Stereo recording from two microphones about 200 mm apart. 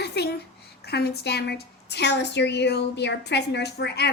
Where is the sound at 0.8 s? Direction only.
55° left (ahead or behind).